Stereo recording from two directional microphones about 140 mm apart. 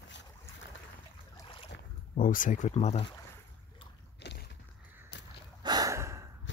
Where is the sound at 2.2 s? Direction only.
70° left (ahead or behind); by 3.1 s 45° left (ahead or behind).